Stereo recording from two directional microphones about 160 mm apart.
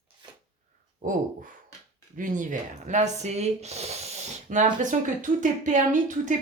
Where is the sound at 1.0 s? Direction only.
55° right (ahead or behind).